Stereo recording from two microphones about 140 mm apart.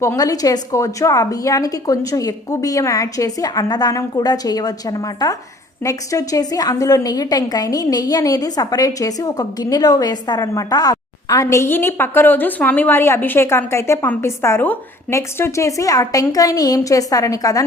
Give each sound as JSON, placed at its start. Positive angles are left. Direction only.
{"t": 0.0, "sound": "a woman's voice", "side_deg": 25}